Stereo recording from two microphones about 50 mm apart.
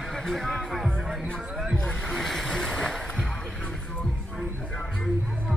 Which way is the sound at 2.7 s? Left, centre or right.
Centre.